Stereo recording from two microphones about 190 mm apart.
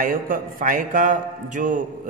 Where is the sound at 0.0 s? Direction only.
45° right (ahead or behind).